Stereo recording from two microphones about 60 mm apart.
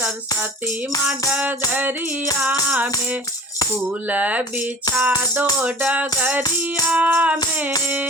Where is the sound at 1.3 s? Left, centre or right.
Right.